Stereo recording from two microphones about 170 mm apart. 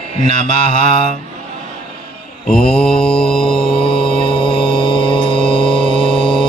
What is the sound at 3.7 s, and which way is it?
Mantra, 30° left (ahead or behind).